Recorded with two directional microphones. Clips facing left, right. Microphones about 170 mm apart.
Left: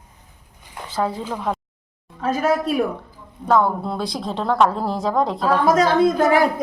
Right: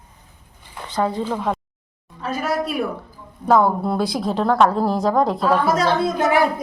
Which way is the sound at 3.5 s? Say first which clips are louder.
Right 2 dB; 5° right (ahead or behind).